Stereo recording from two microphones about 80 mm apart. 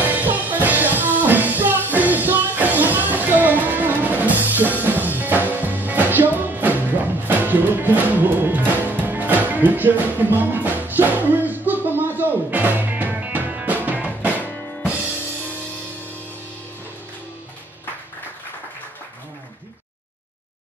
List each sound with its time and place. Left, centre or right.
0.0 s music: right